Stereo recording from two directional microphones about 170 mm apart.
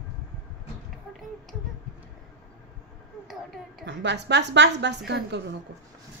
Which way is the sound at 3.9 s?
90° right.